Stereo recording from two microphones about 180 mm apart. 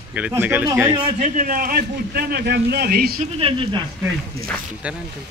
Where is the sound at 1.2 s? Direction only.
50° right (ahead or behind).